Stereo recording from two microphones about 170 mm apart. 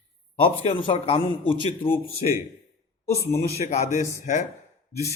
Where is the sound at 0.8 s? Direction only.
30° left (ahead or behind).